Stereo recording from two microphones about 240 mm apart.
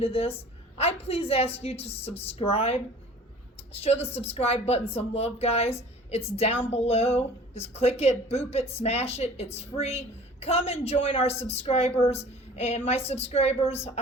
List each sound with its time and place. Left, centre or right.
0.0 s a woman's voice: left